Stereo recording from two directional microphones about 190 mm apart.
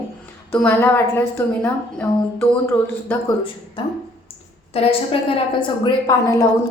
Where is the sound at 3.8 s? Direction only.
25° left (ahead or behind).